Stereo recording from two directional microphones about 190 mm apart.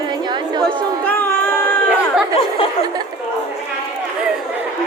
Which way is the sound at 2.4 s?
30° left (ahead or behind).